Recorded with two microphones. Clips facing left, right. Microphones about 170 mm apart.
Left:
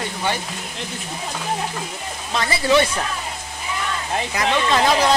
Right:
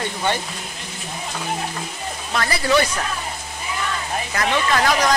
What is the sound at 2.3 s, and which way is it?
Speech, 20° left (ahead or behind).